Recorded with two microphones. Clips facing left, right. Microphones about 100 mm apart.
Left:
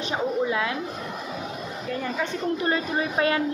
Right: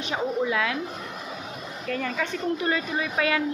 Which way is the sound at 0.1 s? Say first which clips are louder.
Even; 30° left (ahead or behind).